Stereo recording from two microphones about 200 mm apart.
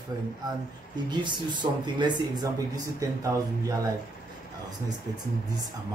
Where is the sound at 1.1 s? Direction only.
25° right (ahead or behind).